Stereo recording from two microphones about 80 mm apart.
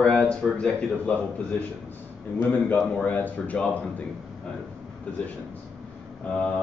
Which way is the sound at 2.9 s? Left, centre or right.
Left.